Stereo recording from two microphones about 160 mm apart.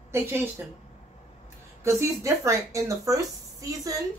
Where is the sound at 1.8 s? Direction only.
15° right (ahead or behind).